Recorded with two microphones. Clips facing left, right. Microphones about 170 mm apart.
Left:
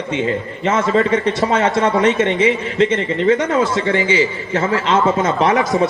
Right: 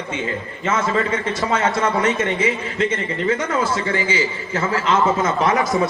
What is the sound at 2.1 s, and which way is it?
Speech, 20° left (ahead or behind).